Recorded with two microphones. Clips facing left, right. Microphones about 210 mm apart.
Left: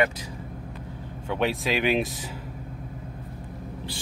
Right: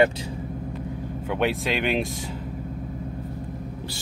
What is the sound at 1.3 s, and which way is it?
Speech, centre (ahead or behind).